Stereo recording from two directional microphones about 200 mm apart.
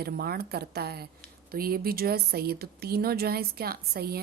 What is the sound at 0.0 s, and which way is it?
Speech, 50° right (ahead or behind).